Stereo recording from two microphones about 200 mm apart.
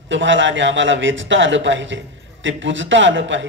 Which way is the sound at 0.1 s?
70° right (ahead or behind).